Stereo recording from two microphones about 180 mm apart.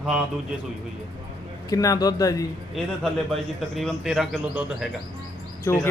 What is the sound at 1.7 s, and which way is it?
Speech, 20° left (ahead or behind).